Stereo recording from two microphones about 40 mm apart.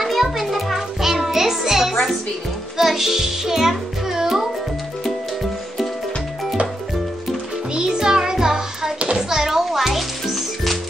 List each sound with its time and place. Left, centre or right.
0.0 s music: centre
7.7 s music: centre